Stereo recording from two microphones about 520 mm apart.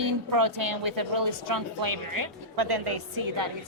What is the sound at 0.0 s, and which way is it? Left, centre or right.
Speech, right.